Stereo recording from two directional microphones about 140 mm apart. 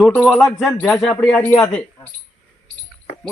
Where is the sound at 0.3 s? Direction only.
Centre (ahead or behind).